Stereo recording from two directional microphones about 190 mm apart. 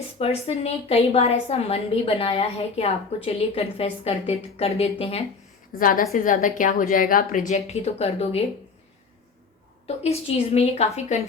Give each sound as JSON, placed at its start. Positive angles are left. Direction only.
{"t": 0.2, "sound": "a woman's voice", "side_deg": 30}
{"t": 5.8, "sound": "a woman's voice", "side_deg": 45}
{"t": 9.8, "sound": "a woman's voice", "side_deg": 35}